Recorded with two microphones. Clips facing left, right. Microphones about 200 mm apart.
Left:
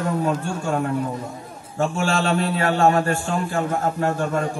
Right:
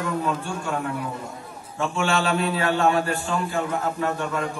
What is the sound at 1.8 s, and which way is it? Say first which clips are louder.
A man's voice: left 2 dB; 35° left (ahead or behind).